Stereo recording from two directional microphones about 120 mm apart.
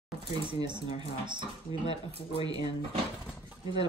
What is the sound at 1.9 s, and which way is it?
Speech, 55° right (ahead or behind).